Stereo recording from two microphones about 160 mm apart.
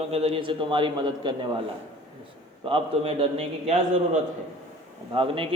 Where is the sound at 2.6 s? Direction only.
35° right (ahead or behind).